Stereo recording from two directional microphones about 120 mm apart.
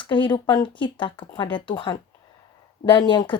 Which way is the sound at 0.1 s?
40° left (ahead or behind).